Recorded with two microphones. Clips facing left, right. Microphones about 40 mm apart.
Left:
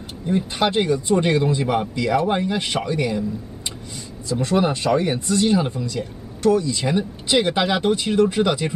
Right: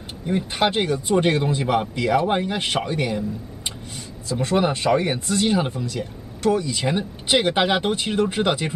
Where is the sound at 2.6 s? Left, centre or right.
Right.